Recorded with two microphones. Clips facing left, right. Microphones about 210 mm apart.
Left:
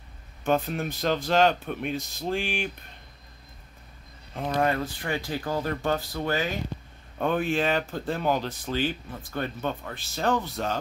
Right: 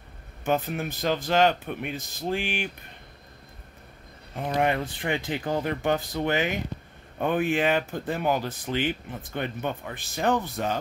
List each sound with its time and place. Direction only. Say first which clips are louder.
0.5 s speech: left 1 dB; 5° right (ahead or behind)
4.4 s speech: even; 15° right (ahead or behind)